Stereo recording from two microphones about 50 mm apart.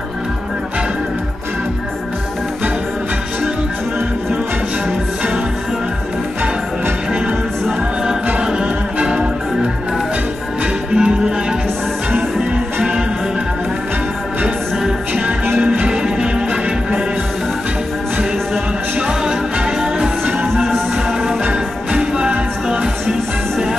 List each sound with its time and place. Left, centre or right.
7.1 s music: centre
8.4 s music: centre
10.6 s music: centre
15.6 s music: right
18.9 s music: centre
21.5 s music: right